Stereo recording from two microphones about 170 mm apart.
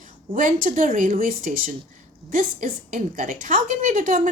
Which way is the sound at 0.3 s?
50° right (ahead or behind).